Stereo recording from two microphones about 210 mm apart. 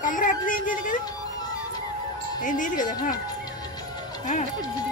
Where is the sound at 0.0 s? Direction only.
40° left (ahead or behind).